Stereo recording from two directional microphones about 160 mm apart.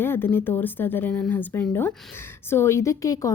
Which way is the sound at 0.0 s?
15° left (ahead or behind).